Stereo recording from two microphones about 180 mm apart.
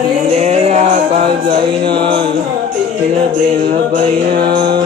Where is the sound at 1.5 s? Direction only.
25° right (ahead or behind).